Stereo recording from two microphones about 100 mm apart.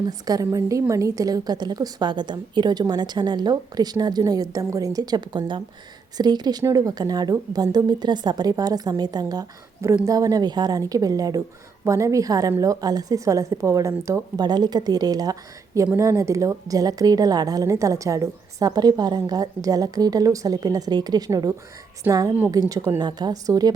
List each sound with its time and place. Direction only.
0.0 s a woman's voice: 40° right (ahead or behind)
14.4 s a woman's voice: 45° right (ahead or behind)
22.0 s a woman's voice: 20° right (ahead or behind)
22.5 s a woman's voice: 30° right (ahead or behind)
23.0 s a woman's voice: 45° right (ahead or behind)